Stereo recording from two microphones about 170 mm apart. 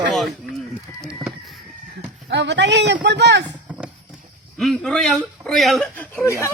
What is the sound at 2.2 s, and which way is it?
A man's voice, 90° right.